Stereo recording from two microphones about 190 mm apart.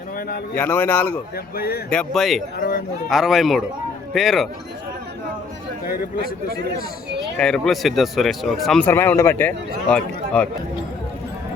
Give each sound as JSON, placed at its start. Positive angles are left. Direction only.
{"t": 0.5, "sound": "a man's voice", "side_deg": 10}
{"t": 1.5, "sound": "speech", "side_deg": 55}
{"t": 1.9, "sound": "speech", "side_deg": 0}
{"t": 2.6, "sound": "speech", "side_deg": 50}
{"t": 3.1, "sound": "speech", "side_deg": 0}
{"t": 7.3, "sound": "speech", "side_deg": 5}